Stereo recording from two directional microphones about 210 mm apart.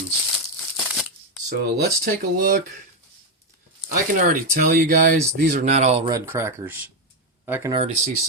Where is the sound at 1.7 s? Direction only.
45° right (ahead or behind).